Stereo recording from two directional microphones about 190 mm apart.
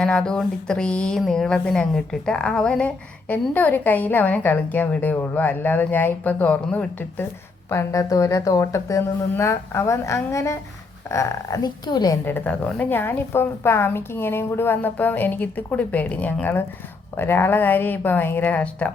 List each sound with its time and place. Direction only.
0.0 s a woman's voice: 5° left (ahead or behind); by 12.1 s 20° left (ahead or behind)
12.2 s speech: 10° left (ahead or behind)